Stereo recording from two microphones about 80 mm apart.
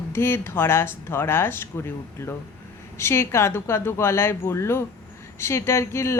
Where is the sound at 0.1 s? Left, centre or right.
Left.